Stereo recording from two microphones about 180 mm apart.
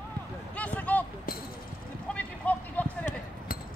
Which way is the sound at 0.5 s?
5° left (ahead or behind).